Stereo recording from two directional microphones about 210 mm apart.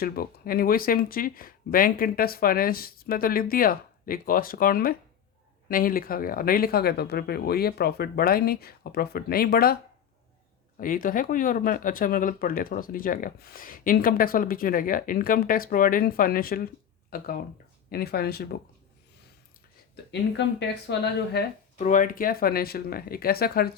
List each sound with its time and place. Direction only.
0.0 s speech: 45° left (ahead or behind)
10.8 s speech: 40° left (ahead or behind)
20.1 s speech: 55° left (ahead or behind)
21.8 s speech: 40° left (ahead or behind)